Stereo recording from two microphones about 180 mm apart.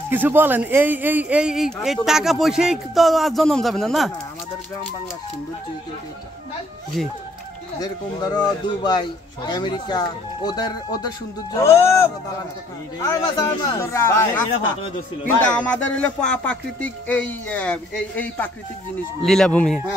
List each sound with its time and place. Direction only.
0.1 s a man's voice: 10° right (ahead or behind)
7.0 s a man's voice: centre (ahead or behind)
7.8 s a man's voice: 20° left (ahead or behind); by 19.8 s 5° left (ahead or behind)